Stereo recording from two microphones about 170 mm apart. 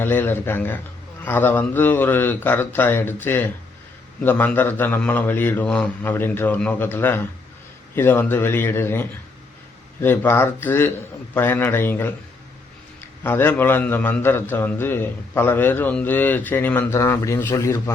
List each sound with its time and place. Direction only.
0.0 s a man's voice: 10° left (ahead or behind)
13.2 s a man's voice: 10° left (ahead or behind)